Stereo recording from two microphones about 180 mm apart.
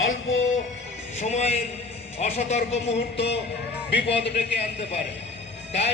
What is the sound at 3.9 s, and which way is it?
Speech, 70° left (ahead or behind).